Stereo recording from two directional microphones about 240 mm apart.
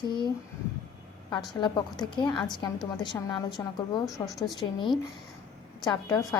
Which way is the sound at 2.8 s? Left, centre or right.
Centre.